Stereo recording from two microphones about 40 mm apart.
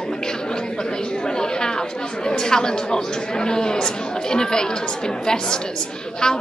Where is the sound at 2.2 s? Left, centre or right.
Centre.